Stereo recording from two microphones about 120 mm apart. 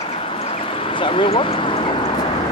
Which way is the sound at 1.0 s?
45° left (ahead or behind).